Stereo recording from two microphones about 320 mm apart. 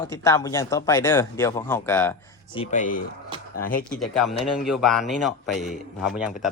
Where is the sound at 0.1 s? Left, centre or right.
Centre.